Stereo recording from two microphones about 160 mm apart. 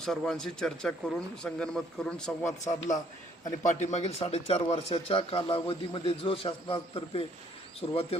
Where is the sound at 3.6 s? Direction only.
50° left (ahead or behind).